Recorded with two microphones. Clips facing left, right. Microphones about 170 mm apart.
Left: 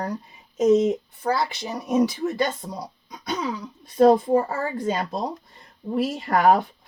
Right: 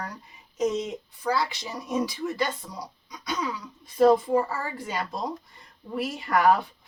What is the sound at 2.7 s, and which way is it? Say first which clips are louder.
Throat clearing: left 5 dB; 55° left (ahead or behind).